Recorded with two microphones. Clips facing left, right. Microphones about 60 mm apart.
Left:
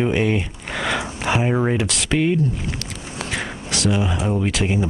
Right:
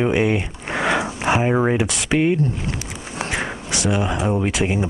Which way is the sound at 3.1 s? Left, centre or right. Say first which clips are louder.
Right 3 dB; centre.